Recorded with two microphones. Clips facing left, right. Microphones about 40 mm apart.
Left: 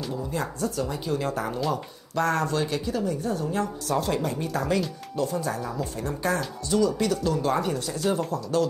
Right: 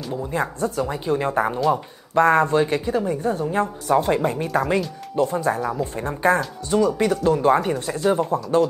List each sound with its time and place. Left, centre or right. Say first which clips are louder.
0.3 s speech: right 7 dB; right